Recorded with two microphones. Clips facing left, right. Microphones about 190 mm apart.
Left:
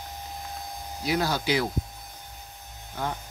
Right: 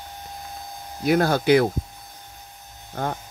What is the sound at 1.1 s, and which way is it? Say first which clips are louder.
Speech: right 8 dB; 55° right (ahead or behind).